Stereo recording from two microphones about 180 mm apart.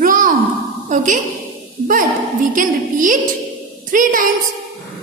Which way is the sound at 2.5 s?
50° right (ahead or behind).